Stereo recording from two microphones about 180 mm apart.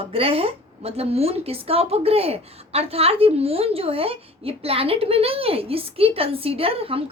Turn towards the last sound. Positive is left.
turn(degrees=-30)  # may be behind; listen again after turning